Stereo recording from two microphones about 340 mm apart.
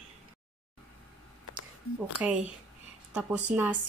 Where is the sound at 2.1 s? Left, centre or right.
Centre.